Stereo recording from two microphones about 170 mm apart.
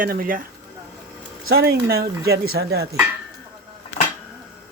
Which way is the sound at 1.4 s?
65° right (ahead or behind).